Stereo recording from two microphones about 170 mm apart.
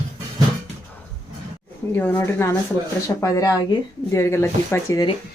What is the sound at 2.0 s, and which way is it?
Speech, 10° left (ahead or behind).